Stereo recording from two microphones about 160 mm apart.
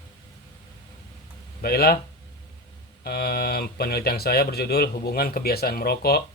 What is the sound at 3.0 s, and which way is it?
Speech, 75° left (ahead or behind).